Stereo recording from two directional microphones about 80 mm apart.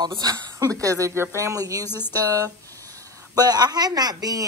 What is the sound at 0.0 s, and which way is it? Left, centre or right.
A woman's voice, right.